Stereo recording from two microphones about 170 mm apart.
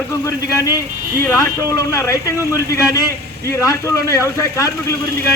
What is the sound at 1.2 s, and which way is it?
Speech, 15° left (ahead or behind).